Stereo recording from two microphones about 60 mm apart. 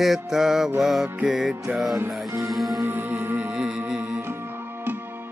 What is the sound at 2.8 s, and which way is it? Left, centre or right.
Music, right.